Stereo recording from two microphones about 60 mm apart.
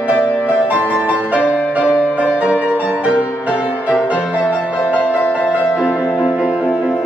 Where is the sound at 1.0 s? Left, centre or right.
Centre.